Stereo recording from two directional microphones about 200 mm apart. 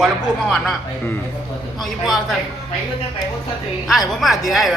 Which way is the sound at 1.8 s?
Centre (ahead or behind).